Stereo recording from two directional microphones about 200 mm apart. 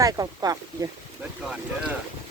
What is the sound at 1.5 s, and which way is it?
Speech, 5° right (ahead or behind).